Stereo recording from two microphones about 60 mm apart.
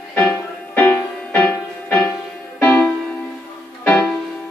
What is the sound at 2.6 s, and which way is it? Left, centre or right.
Music, centre.